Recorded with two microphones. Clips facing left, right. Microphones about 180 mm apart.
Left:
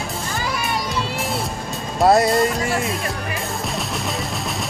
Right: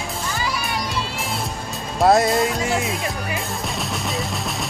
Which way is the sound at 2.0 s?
Centre (ahead or behind).